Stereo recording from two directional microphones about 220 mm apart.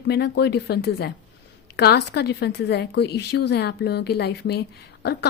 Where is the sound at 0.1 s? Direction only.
50° left (ahead or behind).